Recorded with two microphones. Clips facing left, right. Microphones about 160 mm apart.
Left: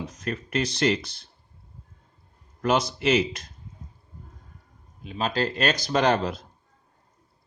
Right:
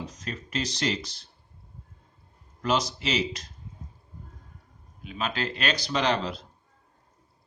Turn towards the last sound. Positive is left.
turn(degrees=45)  # may be behind; listen again after turning